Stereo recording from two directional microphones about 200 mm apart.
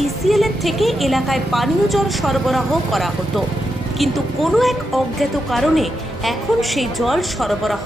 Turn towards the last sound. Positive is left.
turn(degrees=0)  # may be behind; listen again after turning